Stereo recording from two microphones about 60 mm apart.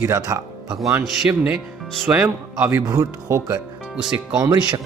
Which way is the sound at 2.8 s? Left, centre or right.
Right.